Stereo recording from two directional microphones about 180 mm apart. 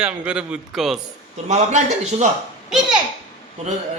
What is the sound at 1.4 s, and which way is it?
Speech, 40° right (ahead or behind).